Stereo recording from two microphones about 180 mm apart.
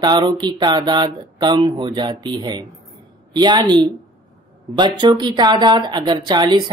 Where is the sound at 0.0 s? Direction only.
25° right (ahead or behind).